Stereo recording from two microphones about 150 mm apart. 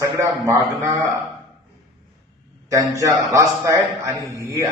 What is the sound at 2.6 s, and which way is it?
A man's voice, 20° right (ahead or behind).